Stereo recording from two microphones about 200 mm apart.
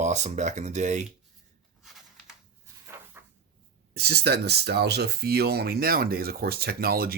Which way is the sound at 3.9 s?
50° right (ahead or behind).